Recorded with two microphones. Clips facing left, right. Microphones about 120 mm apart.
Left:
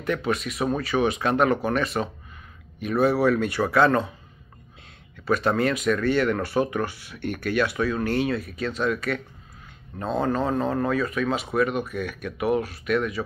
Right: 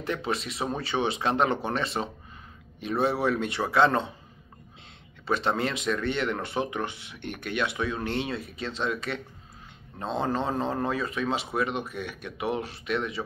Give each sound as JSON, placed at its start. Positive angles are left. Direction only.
{"t": 0.0, "sound": "speech", "side_deg": -30}
{"t": 5.2, "sound": "speech", "side_deg": -25}